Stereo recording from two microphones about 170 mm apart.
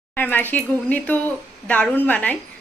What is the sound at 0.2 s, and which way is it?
A woman's voice, 10° left (ahead or behind).